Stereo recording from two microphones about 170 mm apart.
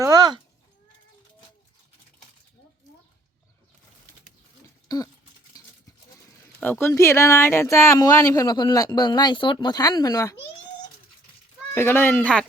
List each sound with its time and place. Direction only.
0.0 s a sound: 20° right (ahead or behind)
4.9 s toothbrush: 20° left (ahead or behind)
6.6 s speech: 10° left (ahead or behind)
11.7 s speech: 15° left (ahead or behind)